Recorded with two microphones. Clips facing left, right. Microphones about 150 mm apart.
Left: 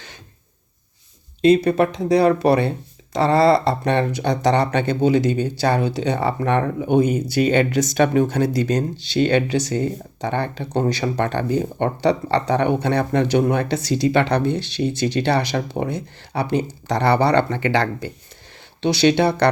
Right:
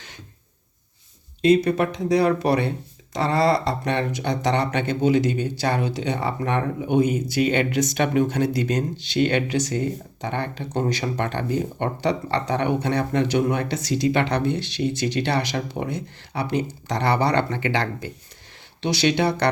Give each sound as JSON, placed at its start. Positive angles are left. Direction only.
{"t": 1.4, "sound": "speech", "side_deg": 30}